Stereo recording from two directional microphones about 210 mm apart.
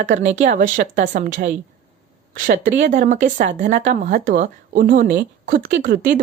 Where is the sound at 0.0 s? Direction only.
35° right (ahead or behind).